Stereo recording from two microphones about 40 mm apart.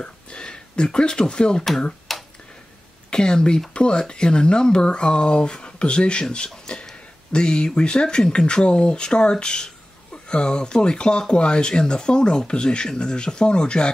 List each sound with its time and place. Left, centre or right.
0.0 s speech: left
2.1 s a sound: centre
3.1 s speech: left